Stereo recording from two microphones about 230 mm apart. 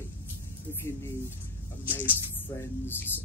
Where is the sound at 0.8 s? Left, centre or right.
Centre.